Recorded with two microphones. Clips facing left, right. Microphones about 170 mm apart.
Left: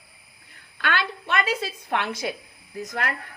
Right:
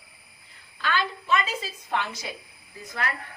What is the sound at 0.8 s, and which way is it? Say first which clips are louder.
Speech: left 1 dB; 70° left (ahead or behind).